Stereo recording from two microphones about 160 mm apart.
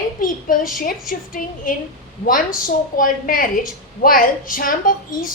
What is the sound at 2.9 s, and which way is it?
A woman's voice, 60° left (ahead or behind).